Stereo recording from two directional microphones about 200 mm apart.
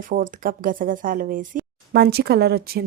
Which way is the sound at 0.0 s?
45° right (ahead or behind).